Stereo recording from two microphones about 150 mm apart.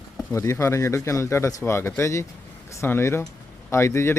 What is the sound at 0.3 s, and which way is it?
Speech, 20° left (ahead or behind).